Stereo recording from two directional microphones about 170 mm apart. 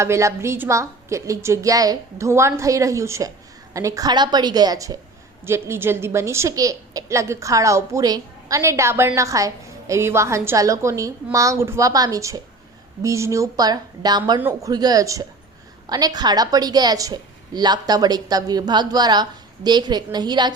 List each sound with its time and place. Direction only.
0.0 s a woman's voice: 15° right (ahead or behind)